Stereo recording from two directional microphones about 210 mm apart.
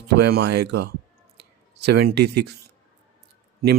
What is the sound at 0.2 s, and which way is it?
Speech, 50° right (ahead or behind).